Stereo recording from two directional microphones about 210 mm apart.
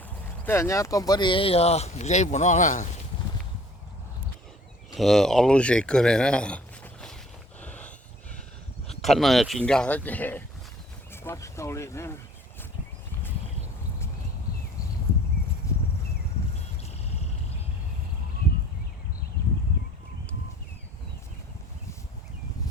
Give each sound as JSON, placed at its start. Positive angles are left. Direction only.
{"t": 0.4, "sound": "speech", "side_deg": 10}
{"t": 4.9, "sound": "speech", "side_deg": 0}
{"t": 7.6, "sound": "dog", "side_deg": 5}
{"t": 9.0, "sound": "speech", "side_deg": 0}
{"t": 15.6, "sound": "a sound", "side_deg": 15}